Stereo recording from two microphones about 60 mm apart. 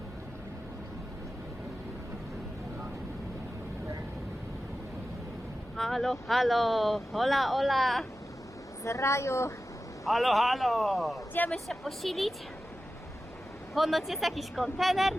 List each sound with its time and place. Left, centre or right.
5.7 s speech: centre
8.8 s a woman's voice: left
10.1 s speech: centre
13.7 s speech: centre